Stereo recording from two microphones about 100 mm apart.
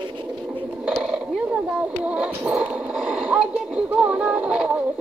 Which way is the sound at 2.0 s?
10° right (ahead or behind).